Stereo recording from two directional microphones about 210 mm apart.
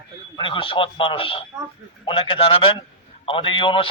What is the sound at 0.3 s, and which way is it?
A man's voice, 25° left (ahead or behind).